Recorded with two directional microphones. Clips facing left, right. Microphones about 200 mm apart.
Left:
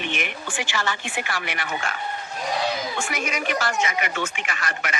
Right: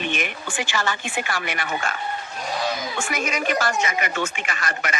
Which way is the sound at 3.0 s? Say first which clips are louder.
Right 2 dB; 45° right (ahead or behind).